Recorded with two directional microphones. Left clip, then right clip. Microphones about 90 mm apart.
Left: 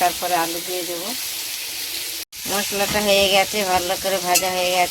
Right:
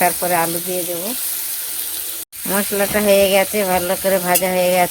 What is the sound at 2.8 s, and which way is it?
Frying, 85° right.